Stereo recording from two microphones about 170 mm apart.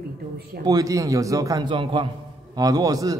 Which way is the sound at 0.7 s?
20° right (ahead or behind).